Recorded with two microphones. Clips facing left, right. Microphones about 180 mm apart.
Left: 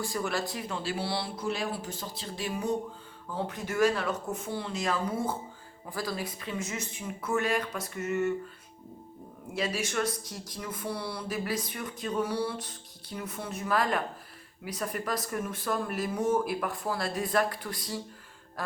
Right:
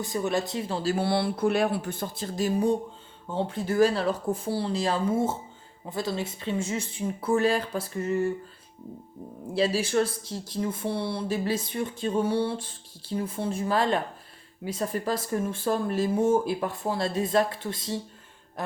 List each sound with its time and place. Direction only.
0.0 s speech: 20° right (ahead or behind)
0.8 s speech: 45° right (ahead or behind)
9.5 s speech: 30° right (ahead or behind)